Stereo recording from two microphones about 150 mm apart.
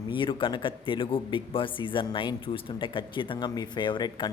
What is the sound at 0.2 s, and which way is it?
Speech, 35° left (ahead or behind).